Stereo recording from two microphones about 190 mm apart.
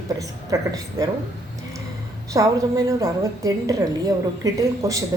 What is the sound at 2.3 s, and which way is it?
A woman's voice, 15° right (ahead or behind).